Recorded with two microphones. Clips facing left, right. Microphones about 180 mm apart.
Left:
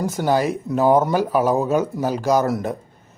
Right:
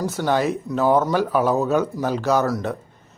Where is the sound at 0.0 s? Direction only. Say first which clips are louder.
Left 1 dB; 10° left (ahead or behind).